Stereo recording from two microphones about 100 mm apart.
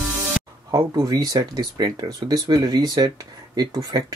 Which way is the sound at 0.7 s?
40° right (ahead or behind).